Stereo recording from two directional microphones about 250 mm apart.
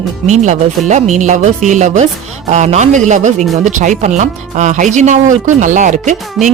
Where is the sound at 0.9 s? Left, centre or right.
Right.